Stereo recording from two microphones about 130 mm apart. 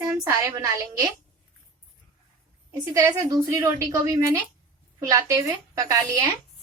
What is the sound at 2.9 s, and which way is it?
A woman's voice, 25° right (ahead or behind).